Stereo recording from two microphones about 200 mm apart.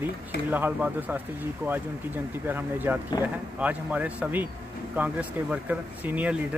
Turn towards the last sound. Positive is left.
turn(degrees=-10)  # may be behind; listen again after turning